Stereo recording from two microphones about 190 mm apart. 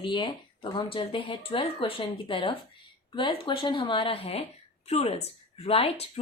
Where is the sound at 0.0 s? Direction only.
25° left (ahead or behind).